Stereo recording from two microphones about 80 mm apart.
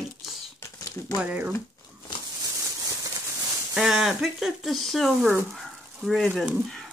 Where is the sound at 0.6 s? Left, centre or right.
Left.